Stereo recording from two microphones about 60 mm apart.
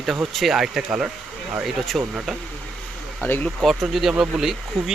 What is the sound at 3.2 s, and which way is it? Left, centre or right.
Speech, left.